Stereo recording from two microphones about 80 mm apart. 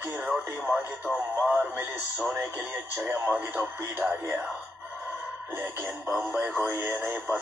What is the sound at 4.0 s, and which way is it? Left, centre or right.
Speech, right.